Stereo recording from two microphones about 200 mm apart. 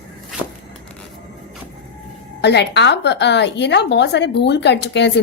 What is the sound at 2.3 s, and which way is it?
A woman's voice, 55° left (ahead or behind).